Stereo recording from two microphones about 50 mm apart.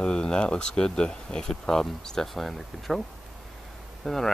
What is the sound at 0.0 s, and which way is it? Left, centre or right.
Speech, centre.